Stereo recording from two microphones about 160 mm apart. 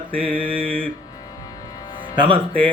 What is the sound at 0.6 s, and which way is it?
Music, 10° left (ahead or behind).